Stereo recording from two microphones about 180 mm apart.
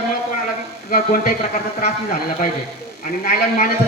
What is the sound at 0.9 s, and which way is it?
Speech, 55° left (ahead or behind).